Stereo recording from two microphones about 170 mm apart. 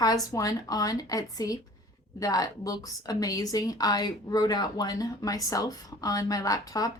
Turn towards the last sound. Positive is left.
turn(degrees=20)  # may be behind; listen again after turning